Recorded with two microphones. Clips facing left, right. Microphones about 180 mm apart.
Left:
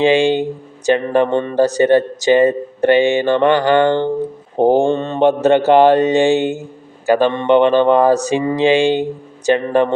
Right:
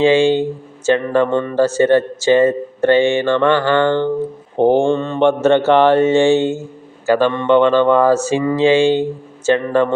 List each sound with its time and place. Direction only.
0.0 s a man's voice: 15° left (ahead or behind)
4.5 s mantra: 40° left (ahead or behind)
4.9 s mantra: 20° left (ahead or behind)
5.5 s a man's voice: 15° left (ahead or behind)